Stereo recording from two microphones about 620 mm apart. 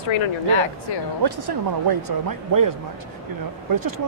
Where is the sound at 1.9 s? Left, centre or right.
Right.